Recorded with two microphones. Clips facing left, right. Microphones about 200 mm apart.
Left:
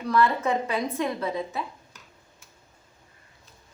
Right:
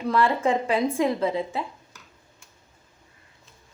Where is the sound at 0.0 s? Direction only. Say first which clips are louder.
Right 1 dB; 25° right (ahead or behind).